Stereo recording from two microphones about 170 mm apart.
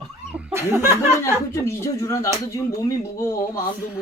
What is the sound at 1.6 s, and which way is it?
Speech, 20° left (ahead or behind).